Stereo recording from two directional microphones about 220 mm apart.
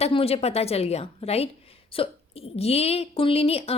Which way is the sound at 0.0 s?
25° left (ahead or behind).